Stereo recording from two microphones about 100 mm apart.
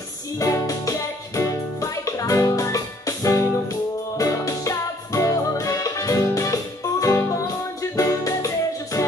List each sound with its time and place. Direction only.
0.4 s music: 35° left (ahead or behind)